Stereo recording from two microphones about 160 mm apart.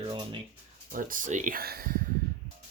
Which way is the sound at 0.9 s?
60° right (ahead or behind).